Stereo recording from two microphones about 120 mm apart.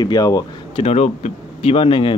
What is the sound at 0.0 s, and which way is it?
Speech, 30° left (ahead or behind).